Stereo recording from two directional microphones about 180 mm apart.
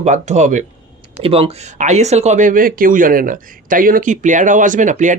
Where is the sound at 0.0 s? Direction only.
40° right (ahead or behind).